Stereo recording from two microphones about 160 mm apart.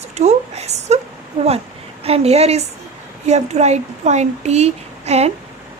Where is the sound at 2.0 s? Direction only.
40° right (ahead or behind).